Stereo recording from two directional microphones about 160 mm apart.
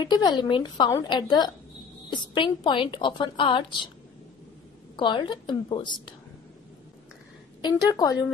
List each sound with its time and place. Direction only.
0.0 s a woman's voice: 25° left (ahead or behind)
4.9 s a woman's voice: 30° left (ahead or behind)
7.6 s a woman's voice: 25° left (ahead or behind)